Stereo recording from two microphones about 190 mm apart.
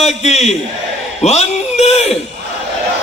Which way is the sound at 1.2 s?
35° left (ahead or behind).